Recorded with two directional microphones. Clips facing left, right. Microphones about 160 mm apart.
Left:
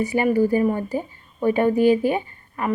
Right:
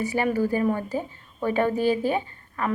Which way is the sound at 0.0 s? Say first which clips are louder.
Left 5 dB; 15° left (ahead or behind).